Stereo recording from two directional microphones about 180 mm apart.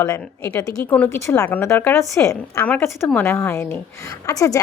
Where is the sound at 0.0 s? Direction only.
15° left (ahead or behind).